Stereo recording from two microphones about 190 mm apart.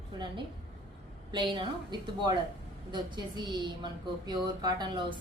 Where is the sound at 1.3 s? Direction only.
25° right (ahead or behind).